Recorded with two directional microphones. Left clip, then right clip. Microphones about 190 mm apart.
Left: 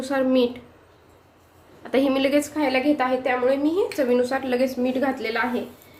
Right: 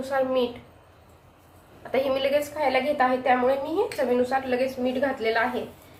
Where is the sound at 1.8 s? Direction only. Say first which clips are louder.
Left 3 dB; 55° left (ahead or behind).